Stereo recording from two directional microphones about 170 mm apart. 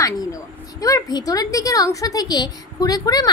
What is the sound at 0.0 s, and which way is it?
A woman's voice, 20° left (ahead or behind).